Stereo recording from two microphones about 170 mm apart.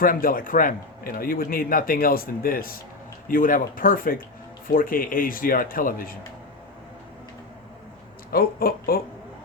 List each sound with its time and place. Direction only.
0.0 s a man's voice: 55° left (ahead or behind)
8.3 s a man's voice: 60° left (ahead or behind)